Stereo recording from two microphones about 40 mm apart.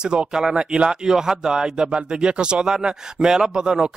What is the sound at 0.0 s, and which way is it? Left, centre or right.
Speech, right.